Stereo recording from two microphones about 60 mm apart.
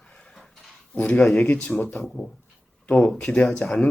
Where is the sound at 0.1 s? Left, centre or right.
Centre.